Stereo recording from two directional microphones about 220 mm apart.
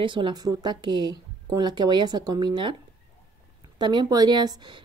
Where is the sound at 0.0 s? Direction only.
20° right (ahead or behind).